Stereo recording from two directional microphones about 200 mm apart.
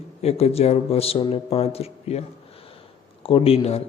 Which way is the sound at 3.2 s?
30° left (ahead or behind).